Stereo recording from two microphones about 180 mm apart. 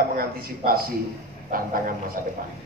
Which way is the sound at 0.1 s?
55° right (ahead or behind).